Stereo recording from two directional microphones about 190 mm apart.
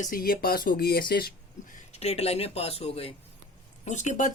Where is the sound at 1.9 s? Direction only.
35° left (ahead or behind).